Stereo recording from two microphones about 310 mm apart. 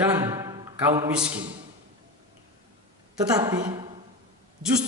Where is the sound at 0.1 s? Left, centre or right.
Centre.